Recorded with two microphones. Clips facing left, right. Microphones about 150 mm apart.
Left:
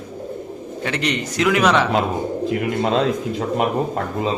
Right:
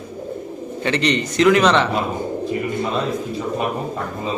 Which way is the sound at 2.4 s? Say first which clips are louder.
Left 3 dB; 85° left.